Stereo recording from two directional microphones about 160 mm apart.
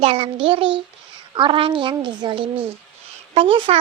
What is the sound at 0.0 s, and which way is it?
A child's voice, 35° right (ahead or behind).